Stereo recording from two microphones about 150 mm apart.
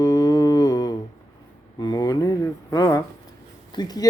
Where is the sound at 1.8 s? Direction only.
25° left (ahead or behind).